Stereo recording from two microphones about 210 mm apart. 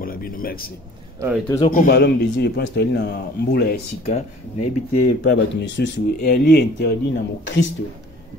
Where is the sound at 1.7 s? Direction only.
45° left (ahead or behind).